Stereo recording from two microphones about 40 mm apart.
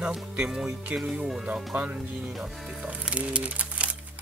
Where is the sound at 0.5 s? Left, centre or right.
Centre.